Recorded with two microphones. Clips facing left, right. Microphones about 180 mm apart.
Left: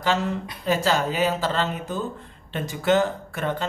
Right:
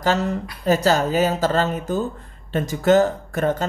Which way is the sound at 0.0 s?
40° right (ahead or behind).